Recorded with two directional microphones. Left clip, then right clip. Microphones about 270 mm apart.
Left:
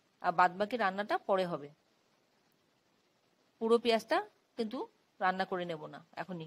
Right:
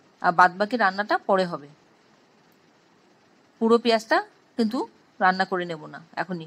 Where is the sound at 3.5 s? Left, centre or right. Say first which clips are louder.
Right 9 dB; left.